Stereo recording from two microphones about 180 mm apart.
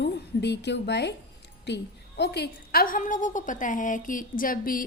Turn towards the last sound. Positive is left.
turn(degrees=50)  # may be behind; listen again after turning